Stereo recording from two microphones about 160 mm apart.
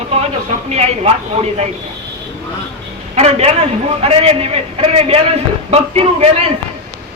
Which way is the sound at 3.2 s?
40° right (ahead or behind).